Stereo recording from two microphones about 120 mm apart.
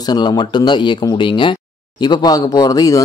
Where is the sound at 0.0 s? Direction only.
35° left (ahead or behind).